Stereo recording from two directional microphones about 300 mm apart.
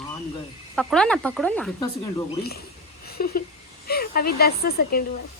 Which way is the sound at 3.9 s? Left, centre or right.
Left.